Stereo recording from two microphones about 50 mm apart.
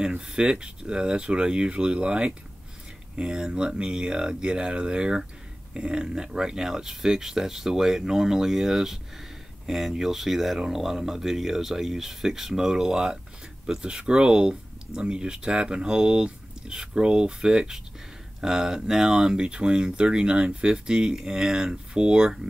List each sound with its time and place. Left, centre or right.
0.0 s speech: centre